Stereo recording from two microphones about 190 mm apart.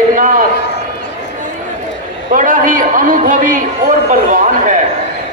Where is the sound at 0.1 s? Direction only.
45° right (ahead or behind).